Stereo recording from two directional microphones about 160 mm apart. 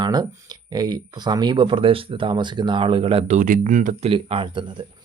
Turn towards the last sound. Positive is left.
turn(degrees=-30)  # may be behind; listen again after turning